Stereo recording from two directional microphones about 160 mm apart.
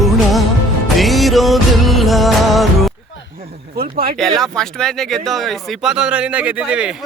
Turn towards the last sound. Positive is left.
turn(degrees=-5)  # may be behind; listen again after turning